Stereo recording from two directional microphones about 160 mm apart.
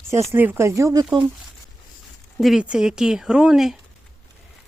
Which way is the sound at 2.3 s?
Centre (ahead or behind).